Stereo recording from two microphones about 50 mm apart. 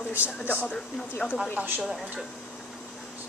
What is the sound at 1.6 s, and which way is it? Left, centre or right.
Speech, right.